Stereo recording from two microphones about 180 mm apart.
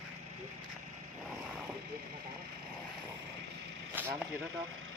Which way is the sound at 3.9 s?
10° right (ahead or behind).